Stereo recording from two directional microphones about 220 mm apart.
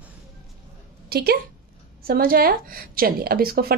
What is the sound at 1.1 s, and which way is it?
Speech, 45° right (ahead or behind).